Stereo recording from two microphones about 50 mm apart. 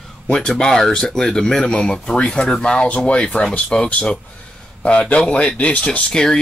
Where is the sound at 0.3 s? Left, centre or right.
Centre.